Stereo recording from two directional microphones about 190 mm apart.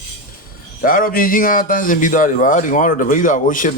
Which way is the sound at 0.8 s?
45° left (ahead or behind).